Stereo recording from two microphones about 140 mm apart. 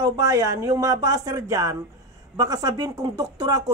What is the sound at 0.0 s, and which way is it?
Speech, 25° right (ahead or behind).